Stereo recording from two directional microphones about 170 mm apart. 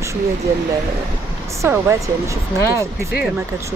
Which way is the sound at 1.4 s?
15° right (ahead or behind).